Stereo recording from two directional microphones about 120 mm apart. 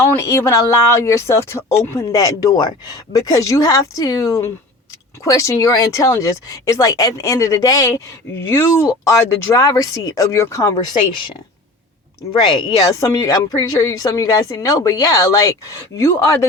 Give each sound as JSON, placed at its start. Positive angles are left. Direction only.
{"t": 0.2, "sound": "speech", "side_deg": 25}
{"t": 12.3, "sound": "speech", "side_deg": 35}